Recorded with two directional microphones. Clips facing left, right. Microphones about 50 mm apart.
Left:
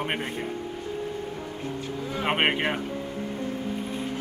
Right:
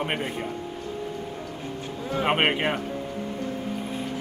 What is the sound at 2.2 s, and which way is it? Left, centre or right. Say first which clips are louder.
Speech: right 2 dB; centre.